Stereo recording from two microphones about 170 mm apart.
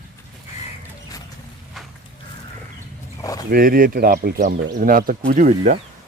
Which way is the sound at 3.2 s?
20° left (ahead or behind).